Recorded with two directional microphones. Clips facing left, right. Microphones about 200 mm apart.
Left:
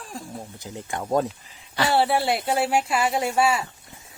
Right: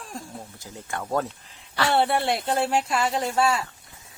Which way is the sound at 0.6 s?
20° left (ahead or behind).